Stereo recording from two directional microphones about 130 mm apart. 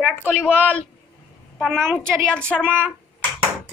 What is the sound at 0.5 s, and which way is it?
A woman's voice, 10° right (ahead or behind).